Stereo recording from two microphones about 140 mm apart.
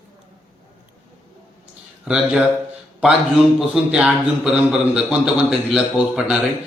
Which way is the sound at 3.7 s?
5° right (ahead or behind).